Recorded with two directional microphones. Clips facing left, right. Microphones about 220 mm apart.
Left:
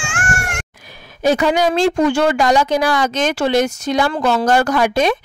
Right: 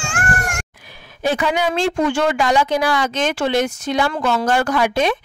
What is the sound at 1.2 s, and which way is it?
Speech, 40° left (ahead or behind).